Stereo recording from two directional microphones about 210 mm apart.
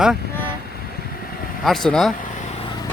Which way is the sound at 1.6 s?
Centre (ahead or behind).